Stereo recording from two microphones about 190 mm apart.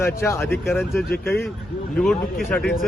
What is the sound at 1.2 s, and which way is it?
Speech, 10° left (ahead or behind).